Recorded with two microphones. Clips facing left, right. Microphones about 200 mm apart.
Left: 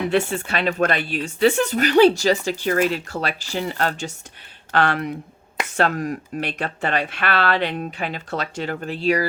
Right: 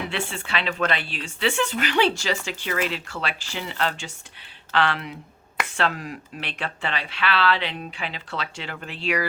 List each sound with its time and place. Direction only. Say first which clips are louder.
0.1 s speech: left 8 dB; 40° left (ahead or behind)